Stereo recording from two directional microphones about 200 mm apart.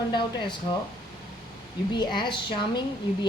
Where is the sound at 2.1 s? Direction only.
25° left (ahead or behind).